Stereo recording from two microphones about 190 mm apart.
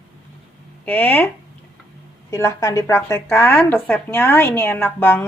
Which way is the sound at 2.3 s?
15° left (ahead or behind).